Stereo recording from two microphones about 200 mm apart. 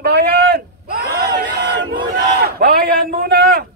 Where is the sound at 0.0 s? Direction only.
55° right (ahead or behind).